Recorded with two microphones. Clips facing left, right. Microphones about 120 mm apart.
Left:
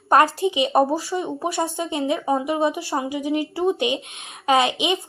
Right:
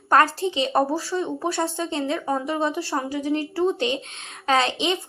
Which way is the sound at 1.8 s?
15° left (ahead or behind).